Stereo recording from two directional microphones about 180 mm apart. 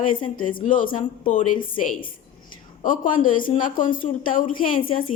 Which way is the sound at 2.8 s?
50° left (ahead or behind).